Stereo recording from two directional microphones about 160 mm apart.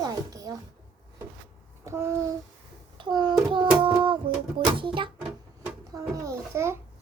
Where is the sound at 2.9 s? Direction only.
30° right (ahead or behind).